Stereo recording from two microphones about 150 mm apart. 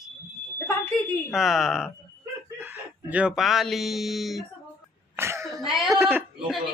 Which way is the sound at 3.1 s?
5° right (ahead or behind).